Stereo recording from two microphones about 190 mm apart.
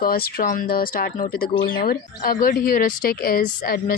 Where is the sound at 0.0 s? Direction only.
50° left (ahead or behind).